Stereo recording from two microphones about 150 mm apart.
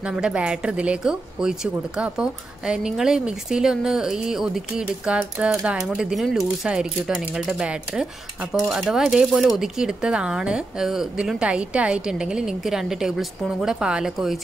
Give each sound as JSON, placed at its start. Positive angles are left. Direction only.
{"t": 0.0, "sound": "speech", "side_deg": -5}